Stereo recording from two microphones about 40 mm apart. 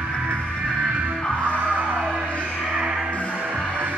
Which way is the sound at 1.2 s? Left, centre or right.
Left.